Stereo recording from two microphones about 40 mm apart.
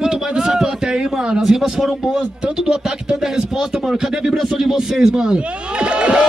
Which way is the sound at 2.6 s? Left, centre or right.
Centre.